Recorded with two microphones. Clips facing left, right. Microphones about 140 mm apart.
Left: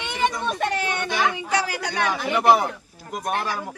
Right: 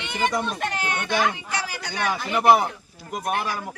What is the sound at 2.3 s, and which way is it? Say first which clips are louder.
Speech: right 1 dB; 5° right (ahead or behind).